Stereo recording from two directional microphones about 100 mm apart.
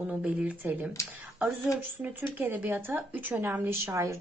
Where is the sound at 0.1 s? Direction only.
10° right (ahead or behind).